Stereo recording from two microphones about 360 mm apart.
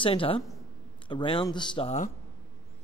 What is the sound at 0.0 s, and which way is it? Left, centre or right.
A man's voice, centre.